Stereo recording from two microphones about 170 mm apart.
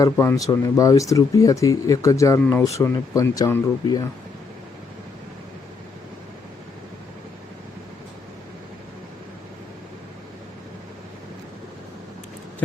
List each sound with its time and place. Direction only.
0.0 s speech: 20° left (ahead or behind)